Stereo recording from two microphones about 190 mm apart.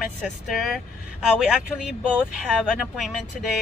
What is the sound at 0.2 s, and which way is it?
Speech, centre (ahead or behind).